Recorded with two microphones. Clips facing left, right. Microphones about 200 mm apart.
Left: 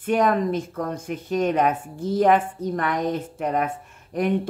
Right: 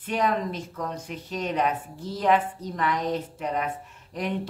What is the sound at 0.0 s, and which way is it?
Speech, 50° left (ahead or behind).